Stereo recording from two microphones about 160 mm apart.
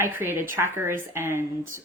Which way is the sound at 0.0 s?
15° right (ahead or behind).